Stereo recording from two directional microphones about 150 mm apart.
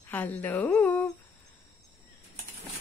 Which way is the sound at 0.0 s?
10° left (ahead or behind).